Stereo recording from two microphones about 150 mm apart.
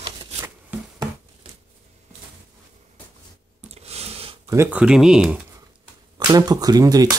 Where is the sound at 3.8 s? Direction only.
45° right (ahead or behind).